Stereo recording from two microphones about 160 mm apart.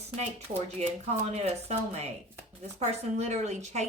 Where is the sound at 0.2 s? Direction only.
40° right (ahead or behind).